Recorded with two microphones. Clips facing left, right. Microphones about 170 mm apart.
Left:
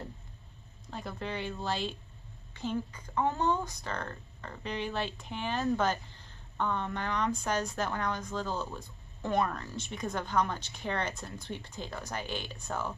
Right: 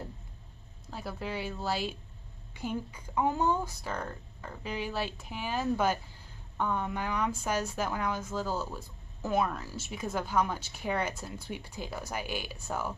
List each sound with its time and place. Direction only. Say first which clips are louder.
0.8 s speech: right 1 dB; 5° right (ahead or behind)